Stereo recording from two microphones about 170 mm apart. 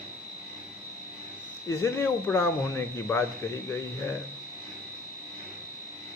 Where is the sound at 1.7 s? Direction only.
15° left (ahead or behind).